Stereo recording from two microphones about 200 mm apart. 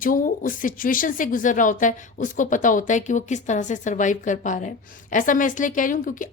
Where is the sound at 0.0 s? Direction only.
45° left (ahead or behind).